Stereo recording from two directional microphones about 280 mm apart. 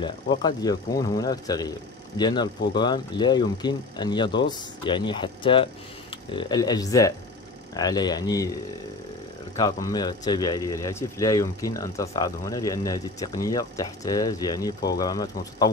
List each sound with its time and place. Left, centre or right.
0.0 s speech: centre
9.6 s speech: centre